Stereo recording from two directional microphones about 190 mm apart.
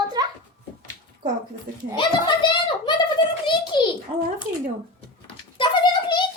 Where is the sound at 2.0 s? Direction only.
25° left (ahead or behind).